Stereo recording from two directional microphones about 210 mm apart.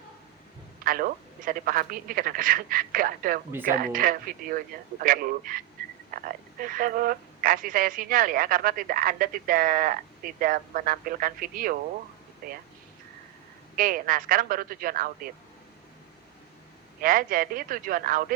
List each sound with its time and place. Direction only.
0.9 s speech: 40° right (ahead or behind)
13.7 s speech: 40° right (ahead or behind)
17.0 s speech: 40° right (ahead or behind)